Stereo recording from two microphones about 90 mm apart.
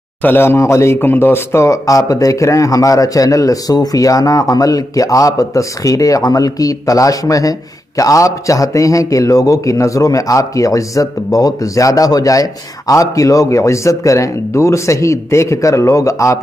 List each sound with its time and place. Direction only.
0.2 s speech: 25° left (ahead or behind)